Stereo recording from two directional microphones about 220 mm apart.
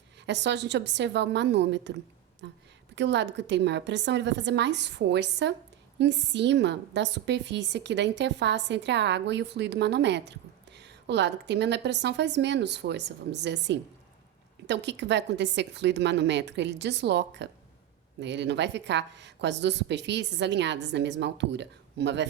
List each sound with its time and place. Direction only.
0.3 s a woman's voice: 55° right (ahead or behind)